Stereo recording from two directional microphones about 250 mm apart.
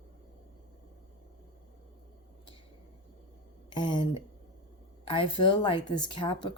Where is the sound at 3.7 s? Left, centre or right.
Centre.